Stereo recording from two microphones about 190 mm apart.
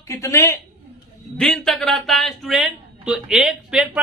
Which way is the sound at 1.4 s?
Centre (ahead or behind).